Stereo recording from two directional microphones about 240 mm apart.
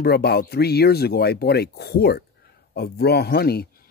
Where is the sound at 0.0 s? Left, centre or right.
Left.